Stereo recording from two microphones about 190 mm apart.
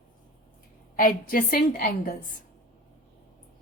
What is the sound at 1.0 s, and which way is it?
A woman's voice, 45° left (ahead or behind).